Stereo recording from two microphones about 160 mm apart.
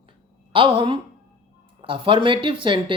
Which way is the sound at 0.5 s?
30° right (ahead or behind).